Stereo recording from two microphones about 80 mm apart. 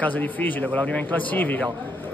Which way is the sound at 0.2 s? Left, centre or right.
Left.